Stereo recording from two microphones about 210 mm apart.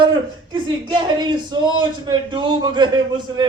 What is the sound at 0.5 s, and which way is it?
A man's voice, 20° right (ahead or behind).